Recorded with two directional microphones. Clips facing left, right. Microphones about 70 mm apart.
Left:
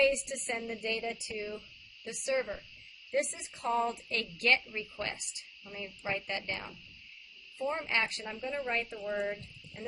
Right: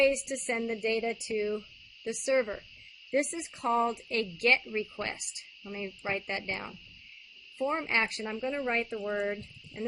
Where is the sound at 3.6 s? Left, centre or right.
Right.